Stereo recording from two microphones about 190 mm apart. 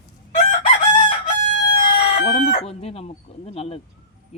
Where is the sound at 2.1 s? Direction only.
35° left (ahead or behind).